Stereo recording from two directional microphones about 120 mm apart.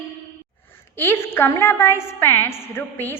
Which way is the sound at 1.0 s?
20° left (ahead or behind).